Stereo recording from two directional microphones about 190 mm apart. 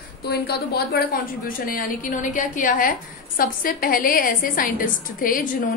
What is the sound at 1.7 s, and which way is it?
A woman's voice, 45° left (ahead or behind).